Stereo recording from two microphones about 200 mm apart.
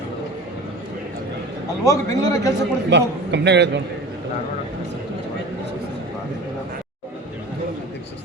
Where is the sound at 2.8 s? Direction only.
60° right (ahead or behind).